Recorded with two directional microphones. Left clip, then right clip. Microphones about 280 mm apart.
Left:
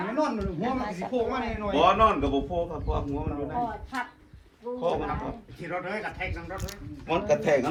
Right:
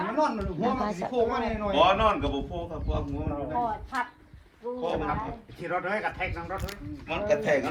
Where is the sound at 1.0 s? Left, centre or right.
Right.